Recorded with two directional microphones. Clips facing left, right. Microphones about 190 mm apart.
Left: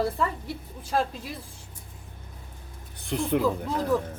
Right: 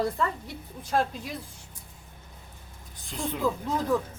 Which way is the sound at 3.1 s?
60° left (ahead or behind).